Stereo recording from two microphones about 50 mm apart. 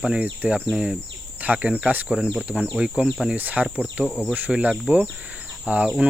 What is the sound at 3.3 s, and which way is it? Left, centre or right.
Speech, right.